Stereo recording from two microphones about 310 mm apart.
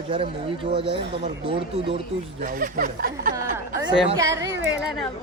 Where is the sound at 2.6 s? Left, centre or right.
Right.